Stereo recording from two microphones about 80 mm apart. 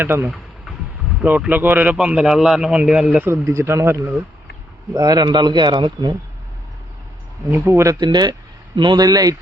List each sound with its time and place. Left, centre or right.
0.0 s speech: right
1.5 s a man's voice: right
3.2 s speech: right
4.9 s a man's voice: right
7.5 s speech: right
7.9 s speech: right